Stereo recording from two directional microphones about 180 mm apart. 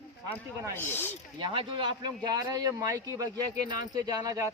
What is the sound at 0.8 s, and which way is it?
Speech, 10° left (ahead or behind).